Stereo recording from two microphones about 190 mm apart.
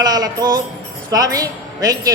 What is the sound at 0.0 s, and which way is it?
A woman's voice, 20° right (ahead or behind).